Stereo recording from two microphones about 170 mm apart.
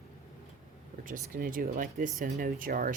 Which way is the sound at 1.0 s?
55° right (ahead or behind).